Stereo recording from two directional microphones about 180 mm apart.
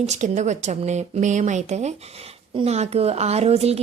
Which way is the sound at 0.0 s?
40° right (ahead or behind).